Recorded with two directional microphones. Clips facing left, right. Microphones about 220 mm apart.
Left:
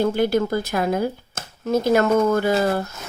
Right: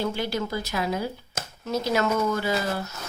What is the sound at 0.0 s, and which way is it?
Speech, 50° left (ahead or behind).